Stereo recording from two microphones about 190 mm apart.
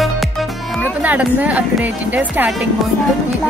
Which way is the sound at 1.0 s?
10° right (ahead or behind).